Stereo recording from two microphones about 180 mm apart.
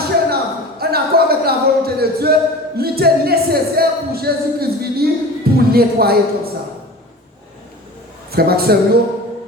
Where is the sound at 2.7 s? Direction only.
60° right (ahead or behind).